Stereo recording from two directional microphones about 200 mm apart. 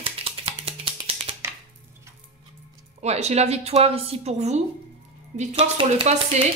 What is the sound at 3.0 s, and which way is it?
Speech, 35° right (ahead or behind).